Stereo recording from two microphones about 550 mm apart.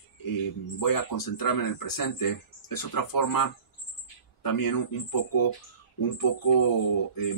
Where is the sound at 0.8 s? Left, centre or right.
Left.